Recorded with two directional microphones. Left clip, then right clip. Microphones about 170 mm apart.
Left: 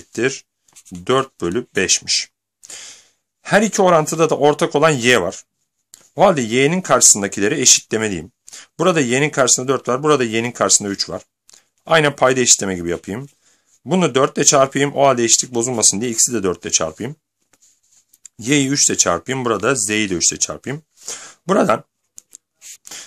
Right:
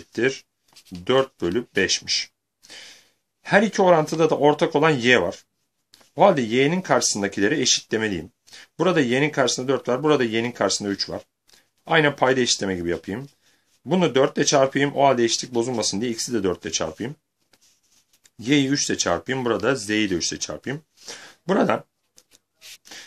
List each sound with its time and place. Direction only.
0.1 s speech: 45° left (ahead or behind)
18.2 s speech: 45° left (ahead or behind)